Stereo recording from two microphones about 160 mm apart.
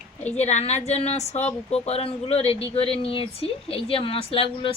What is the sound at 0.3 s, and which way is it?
A woman's voice, 45° left (ahead or behind).